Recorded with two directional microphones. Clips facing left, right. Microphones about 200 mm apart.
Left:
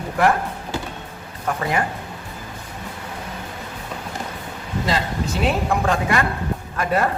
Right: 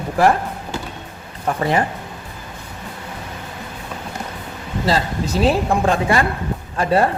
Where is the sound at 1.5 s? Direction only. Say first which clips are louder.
Right 3 dB; 30° right (ahead or behind).